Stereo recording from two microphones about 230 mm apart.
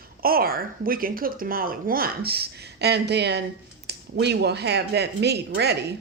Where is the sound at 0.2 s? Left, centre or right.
Right.